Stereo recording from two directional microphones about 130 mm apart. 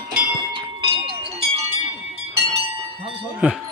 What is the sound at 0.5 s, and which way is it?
Bell, 40° right (ahead or behind).